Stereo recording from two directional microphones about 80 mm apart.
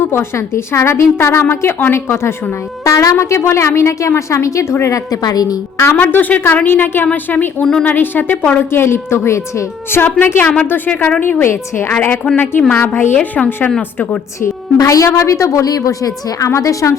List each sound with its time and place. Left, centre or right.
0.0 s a woman's voice: left
2.8 s a woman's voice: left
5.7 s a woman's voice: left
6.0 s speech: left
7.6 s speech: centre
7.9 s a woman's voice: left
14.4 s a woman's voice: left